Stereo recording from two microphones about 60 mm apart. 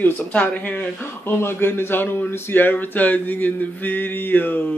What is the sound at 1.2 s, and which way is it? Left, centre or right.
Speech, left.